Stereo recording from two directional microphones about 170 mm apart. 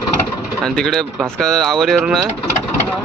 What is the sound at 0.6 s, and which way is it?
Speech, centre (ahead or behind).